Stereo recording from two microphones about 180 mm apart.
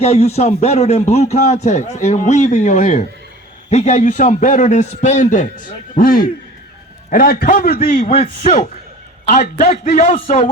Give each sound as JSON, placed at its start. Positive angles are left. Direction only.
{"t": 0.0, "sound": "a man's voice", "side_deg": 35}
{"t": 7.9, "sound": "speech", "side_deg": 40}